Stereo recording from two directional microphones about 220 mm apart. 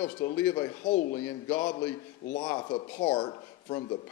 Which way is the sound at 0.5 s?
20° left (ahead or behind).